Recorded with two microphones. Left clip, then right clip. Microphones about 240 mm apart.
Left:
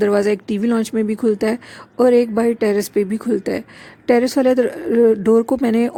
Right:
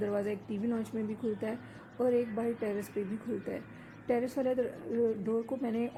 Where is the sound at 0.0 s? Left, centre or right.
Left.